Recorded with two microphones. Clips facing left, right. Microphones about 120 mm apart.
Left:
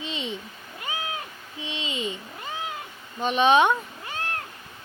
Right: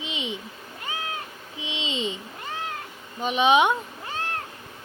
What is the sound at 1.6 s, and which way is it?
Speech, 20° right (ahead or behind).